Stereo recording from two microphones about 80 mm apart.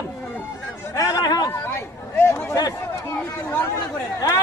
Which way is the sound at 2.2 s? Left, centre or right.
Left.